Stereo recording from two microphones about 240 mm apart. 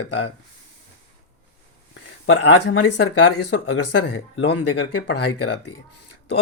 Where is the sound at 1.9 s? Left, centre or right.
Left.